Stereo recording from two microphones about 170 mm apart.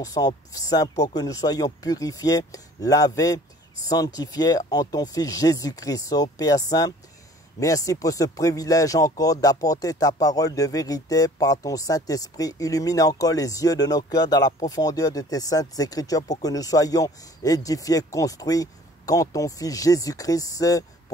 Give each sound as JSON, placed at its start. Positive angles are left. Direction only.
{"t": 0.0, "sound": "speech", "side_deg": 20}